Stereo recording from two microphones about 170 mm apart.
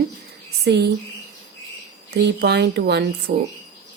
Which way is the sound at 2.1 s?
75° right (ahead or behind).